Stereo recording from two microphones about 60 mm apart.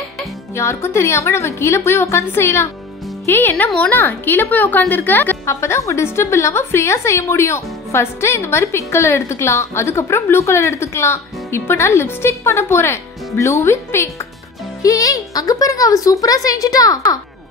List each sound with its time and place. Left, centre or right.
0.6 s a woman's voice: left
5.4 s a woman's voice: left
14.8 s speech: left